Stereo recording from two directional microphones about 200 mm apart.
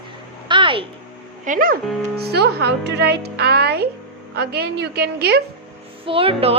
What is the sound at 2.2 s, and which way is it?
Speech, 55° right (ahead or behind).